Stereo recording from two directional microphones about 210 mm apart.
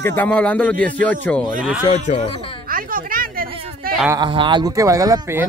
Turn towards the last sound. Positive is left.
turn(degrees=-15)  # may be behind; listen again after turning